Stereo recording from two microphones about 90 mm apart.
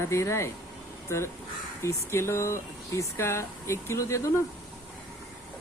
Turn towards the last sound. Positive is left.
turn(degrees=35)  # may be behind; listen again after turning